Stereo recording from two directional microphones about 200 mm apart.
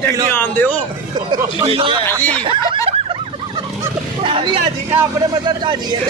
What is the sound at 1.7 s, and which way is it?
Speech, 25° right (ahead or behind).